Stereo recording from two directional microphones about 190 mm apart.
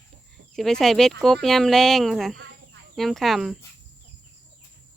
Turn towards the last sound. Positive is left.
turn(degrees=0)  # may be behind; listen again after turning